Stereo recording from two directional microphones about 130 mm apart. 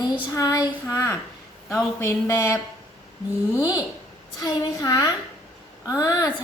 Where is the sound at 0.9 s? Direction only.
25° left (ahead or behind).